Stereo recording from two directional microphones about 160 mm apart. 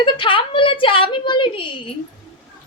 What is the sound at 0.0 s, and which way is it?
Speech, 30° left (ahead or behind).